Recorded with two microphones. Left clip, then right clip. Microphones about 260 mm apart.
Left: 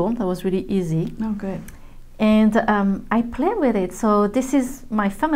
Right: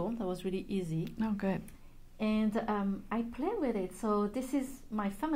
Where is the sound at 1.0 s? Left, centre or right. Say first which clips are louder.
Left 8 dB; right.